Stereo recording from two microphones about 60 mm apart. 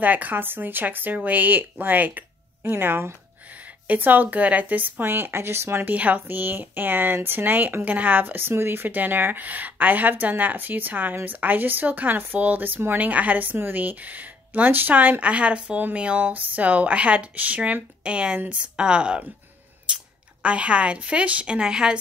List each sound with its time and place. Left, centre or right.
0.0 s speech: right
3.4 s speech: right
5.9 s speech: right
20.4 s speech: centre